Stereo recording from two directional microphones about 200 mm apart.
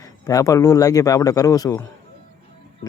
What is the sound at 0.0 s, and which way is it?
Speech, 15° left (ahead or behind).